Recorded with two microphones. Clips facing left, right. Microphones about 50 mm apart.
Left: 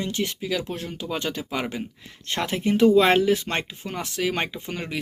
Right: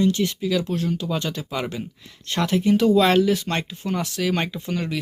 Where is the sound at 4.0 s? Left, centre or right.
Centre.